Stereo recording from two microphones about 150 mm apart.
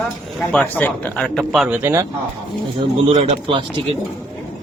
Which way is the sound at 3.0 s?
40° right (ahead or behind).